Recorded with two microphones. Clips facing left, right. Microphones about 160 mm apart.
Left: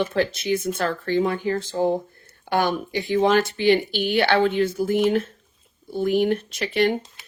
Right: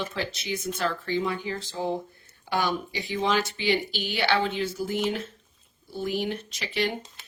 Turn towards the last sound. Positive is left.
turn(degrees=55)  # may be behind; listen again after turning